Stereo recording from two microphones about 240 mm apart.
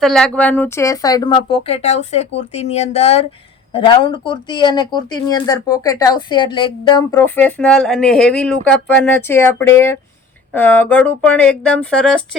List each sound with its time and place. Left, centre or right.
0.0 s speech: centre; by 7.0 s left
7.1 s speech: centre